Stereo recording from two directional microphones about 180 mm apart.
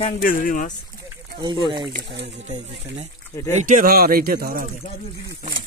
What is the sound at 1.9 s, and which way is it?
Speech, 75° right (ahead or behind).